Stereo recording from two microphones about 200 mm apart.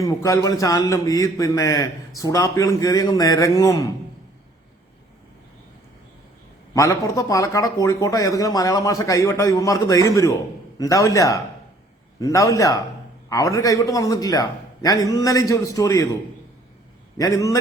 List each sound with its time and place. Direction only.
0.0 s a man's voice: 15° left (ahead or behind)
6.7 s a man's voice: 15° left (ahead or behind)
17.2 s a man's voice: 15° left (ahead or behind)